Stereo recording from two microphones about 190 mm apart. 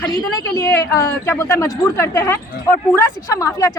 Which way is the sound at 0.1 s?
15° left (ahead or behind).